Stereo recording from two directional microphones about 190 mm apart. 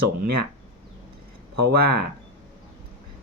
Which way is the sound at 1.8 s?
55° right (ahead or behind).